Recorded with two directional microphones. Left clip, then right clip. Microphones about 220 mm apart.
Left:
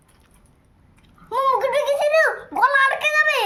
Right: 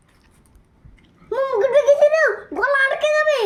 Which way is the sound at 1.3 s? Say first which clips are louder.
Right 1 dB; 25° left (ahead or behind).